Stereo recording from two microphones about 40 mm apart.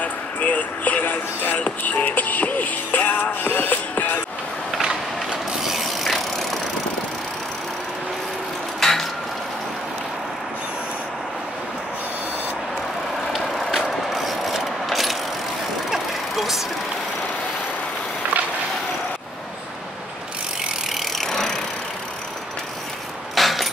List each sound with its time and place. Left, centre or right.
0.0 s music: left
4.8 s mechanisms: centre
5.7 s vehicle: centre
8.7 s a sound: centre
13.8 s vehicle: centre
21.1 s vehicle: centre
23.3 s keys jangling: centre